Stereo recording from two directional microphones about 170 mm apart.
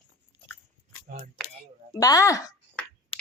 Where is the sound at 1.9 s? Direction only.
20° left (ahead or behind).